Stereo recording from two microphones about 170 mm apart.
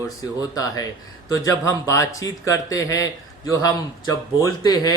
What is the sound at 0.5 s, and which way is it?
Speech, 20° left (ahead or behind).